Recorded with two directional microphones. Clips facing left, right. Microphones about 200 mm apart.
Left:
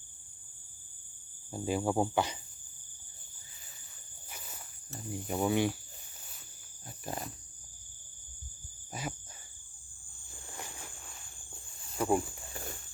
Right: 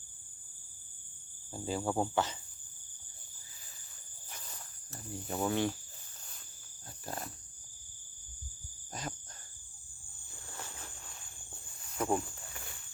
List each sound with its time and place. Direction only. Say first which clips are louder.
1.5 s speech: left 3 dB; 15° left (ahead or behind)
4.3 s insect: left 1 dB; 10° left (ahead or behind)
5.3 s speech: left 3 dB; 10° left (ahead or behind)
6.8 s wild animals: left 2 dB; 15° left (ahead or behind)
8.9 s insect: left 2 dB; 10° left (ahead or behind)
10.5 s a sound: left 1 dB; 15° left (ahead or behind)
11.9 s speech: left 3 dB; 5° left (ahead or behind)
12.5 s a sound: left 10 dB; 45° left (ahead or behind)